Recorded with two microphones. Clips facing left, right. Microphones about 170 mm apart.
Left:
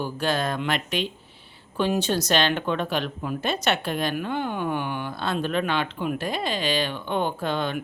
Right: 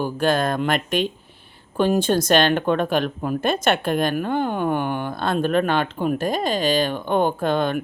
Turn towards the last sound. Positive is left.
turn(degrees=-50)  # may be behind; listen again after turning